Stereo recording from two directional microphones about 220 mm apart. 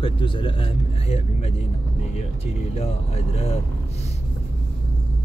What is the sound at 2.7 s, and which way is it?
Speech, 30° left (ahead or behind).